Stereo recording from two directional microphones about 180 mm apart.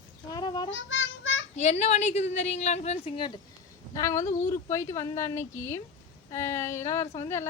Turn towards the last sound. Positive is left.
turn(degrees=15)  # may be behind; listen again after turning